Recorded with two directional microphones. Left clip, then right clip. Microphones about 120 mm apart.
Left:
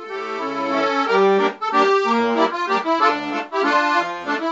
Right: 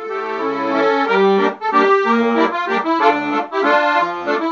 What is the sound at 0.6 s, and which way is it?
Accordion, 10° right (ahead or behind).